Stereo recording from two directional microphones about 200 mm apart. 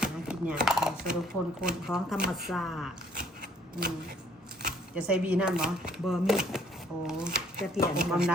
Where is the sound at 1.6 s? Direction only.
5° right (ahead or behind).